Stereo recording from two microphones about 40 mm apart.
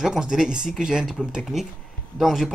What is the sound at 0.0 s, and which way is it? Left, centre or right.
Speech, centre.